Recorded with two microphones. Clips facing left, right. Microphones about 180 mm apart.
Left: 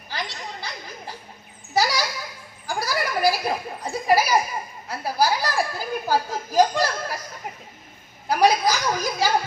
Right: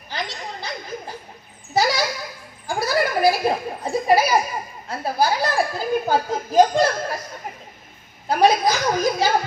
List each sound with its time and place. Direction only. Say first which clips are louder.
0.1 s a sound: right 2 dB; 20° right (ahead or behind)
4.9 s a child's voice: right 1 dB; 20° right (ahead or behind)
8.3 s a child's voice: right 2 dB; 25° right (ahead or behind)